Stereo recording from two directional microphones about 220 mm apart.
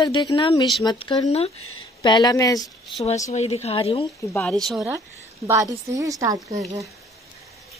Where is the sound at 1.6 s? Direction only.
70° left (ahead or behind).